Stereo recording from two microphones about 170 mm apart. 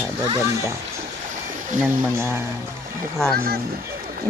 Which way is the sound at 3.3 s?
65° right (ahead or behind).